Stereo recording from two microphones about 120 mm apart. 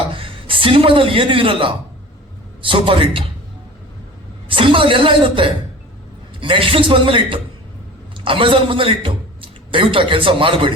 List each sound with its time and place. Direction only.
0.1 s a man's voice: 50° right (ahead or behind)
4.4 s a woman's voice: 45° right (ahead or behind)